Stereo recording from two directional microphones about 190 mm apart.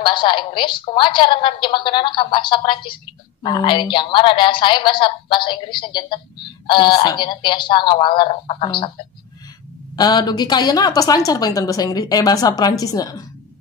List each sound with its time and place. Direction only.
0.0 s a woman's voice: 25° left (ahead or behind)
9.9 s a woman's voice: 20° left (ahead or behind)